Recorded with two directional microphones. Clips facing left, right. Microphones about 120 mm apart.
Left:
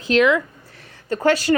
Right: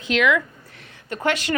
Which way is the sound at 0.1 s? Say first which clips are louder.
Left 4 dB; 35° left (ahead or behind).